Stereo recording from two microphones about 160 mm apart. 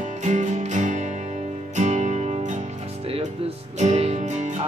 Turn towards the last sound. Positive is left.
turn(degrees=-45)  # may be behind; listen again after turning